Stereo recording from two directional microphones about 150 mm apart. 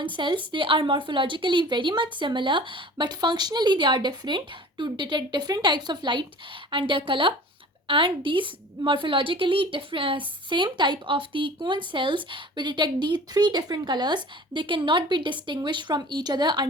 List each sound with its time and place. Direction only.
0.0 s a woman's voice: 35° right (ahead or behind)